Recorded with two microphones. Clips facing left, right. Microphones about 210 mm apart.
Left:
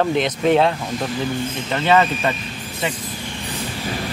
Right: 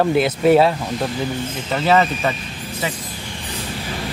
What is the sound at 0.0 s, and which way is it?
A man's voice, 5° right (ahead or behind).